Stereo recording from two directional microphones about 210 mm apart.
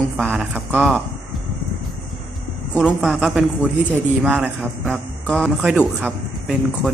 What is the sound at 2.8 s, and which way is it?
A man's voice, centre (ahead or behind).